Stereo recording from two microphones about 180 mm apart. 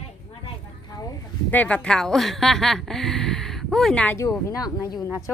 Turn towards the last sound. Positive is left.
turn(degrees=20)  # may be behind; listen again after turning